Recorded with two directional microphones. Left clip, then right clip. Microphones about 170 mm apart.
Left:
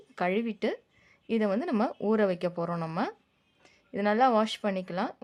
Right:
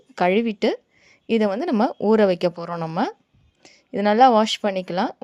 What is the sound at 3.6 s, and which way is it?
Speech, 35° right (ahead or behind).